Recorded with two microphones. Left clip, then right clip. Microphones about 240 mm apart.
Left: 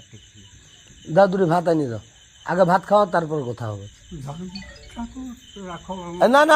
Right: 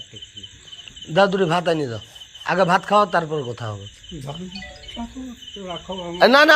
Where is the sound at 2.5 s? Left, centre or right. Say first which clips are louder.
Even; left.